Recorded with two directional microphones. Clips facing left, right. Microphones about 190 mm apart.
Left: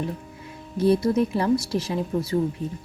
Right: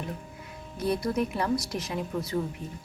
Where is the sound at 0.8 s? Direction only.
30° left (ahead or behind).